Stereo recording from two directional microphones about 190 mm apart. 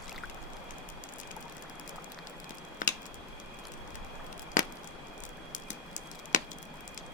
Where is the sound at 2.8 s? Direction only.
45° left (ahead or behind).